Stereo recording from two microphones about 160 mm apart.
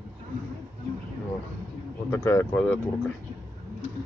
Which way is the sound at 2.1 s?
15° left (ahead or behind).